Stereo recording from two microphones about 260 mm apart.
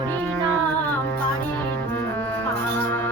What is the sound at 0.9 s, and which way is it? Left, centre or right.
Music, centre.